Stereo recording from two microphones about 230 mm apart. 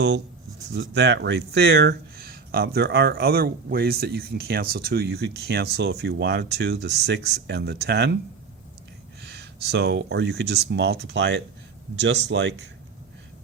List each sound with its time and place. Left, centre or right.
0.7 s speech: right
9.2 s speech: right